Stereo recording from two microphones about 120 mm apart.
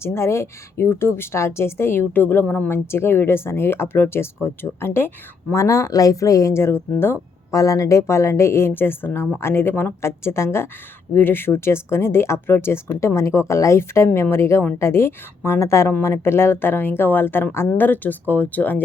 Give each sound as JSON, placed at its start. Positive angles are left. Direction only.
{"t": 0.0, "sound": "speech", "side_deg": 20}